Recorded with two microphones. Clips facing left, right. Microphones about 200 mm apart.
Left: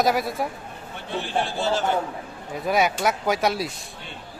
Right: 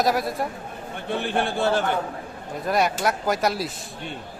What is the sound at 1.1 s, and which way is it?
Speech, 55° right (ahead or behind).